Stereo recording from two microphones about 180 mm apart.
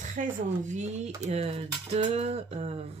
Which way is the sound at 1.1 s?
40° right (ahead or behind).